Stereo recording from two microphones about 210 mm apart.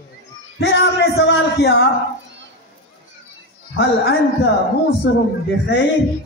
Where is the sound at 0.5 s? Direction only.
55° left (ahead or behind).